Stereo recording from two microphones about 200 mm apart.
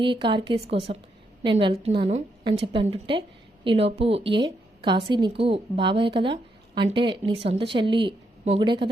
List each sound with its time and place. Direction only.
0.0 s a woman's voice: 25° right (ahead or behind)